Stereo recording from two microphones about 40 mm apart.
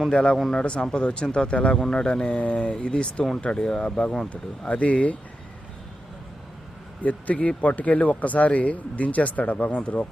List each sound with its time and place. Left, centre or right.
0.1 s speech: left
4.6 s speech: left
7.0 s speech: left